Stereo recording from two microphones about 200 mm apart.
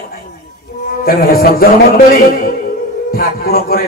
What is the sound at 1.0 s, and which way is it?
Speech, 45° left (ahead or behind).